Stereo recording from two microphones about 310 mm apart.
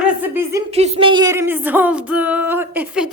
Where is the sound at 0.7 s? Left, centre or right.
Centre.